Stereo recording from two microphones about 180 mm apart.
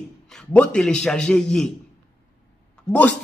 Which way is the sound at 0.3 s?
5° left (ahead or behind).